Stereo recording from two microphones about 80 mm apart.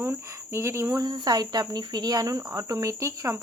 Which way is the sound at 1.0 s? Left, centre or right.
Right.